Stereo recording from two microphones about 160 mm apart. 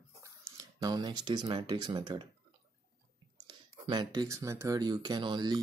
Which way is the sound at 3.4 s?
25° right (ahead or behind).